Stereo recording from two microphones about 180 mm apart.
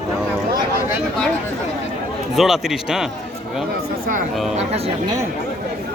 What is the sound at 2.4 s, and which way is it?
Speech, centre (ahead or behind).